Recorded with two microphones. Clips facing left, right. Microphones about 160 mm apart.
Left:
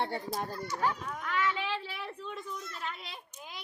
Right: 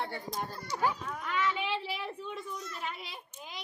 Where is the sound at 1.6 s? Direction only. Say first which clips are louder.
Right 2 dB; 15° right (ahead or behind).